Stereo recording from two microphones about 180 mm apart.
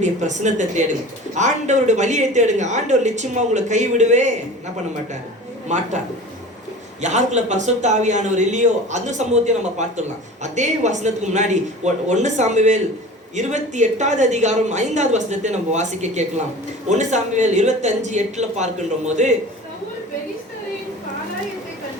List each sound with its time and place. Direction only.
0.0 s speech: 40° right (ahead or behind)
5.6 s speech: 40° right (ahead or behind)
7.0 s speech: 40° right (ahead or behind)